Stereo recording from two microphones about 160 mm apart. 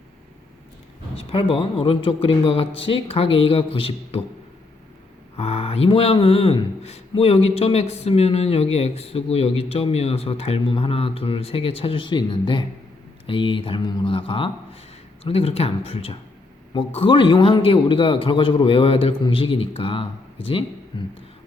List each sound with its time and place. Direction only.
1.2 s speech: 35° left (ahead or behind)
5.4 s speech: 40° left (ahead or behind)